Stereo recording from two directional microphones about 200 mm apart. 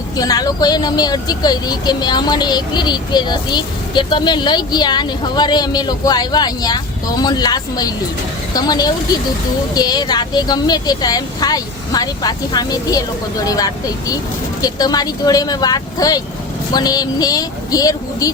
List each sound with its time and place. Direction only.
0.2 s speech: 20° left (ahead or behind)